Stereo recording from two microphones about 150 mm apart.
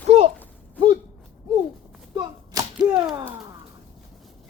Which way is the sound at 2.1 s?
25° right (ahead or behind).